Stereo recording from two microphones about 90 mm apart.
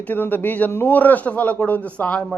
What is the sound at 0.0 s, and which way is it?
A man's voice, 20° left (ahead or behind).